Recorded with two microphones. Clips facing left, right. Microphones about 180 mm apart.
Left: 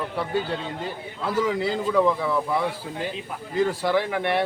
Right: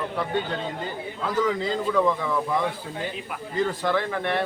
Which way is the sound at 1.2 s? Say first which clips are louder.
Left 1 dB; 10° left (ahead or behind).